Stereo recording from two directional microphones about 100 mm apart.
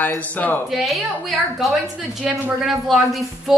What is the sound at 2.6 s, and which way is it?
Speech, centre (ahead or behind).